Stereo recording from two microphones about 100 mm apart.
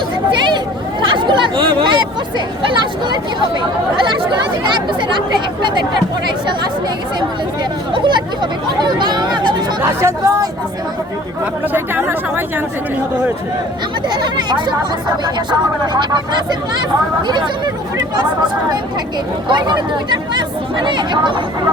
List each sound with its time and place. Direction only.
1.0 s speech: 50° right (ahead or behind)
4.1 s speech: 50° right (ahead or behind)
7.9 s chatter: 50° right (ahead or behind)
10.0 s speech: 30° right (ahead or behind)
11.7 s speech: 20° right (ahead or behind)
14.1 s speech: 45° right (ahead or behind)
19.5 s speech: 50° right (ahead or behind)